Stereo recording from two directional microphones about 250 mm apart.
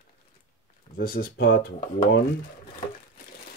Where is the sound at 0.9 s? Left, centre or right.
Left.